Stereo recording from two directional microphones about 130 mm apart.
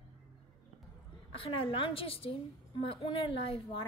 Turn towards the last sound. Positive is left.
turn(degrees=45)  # may be behind; listen again after turning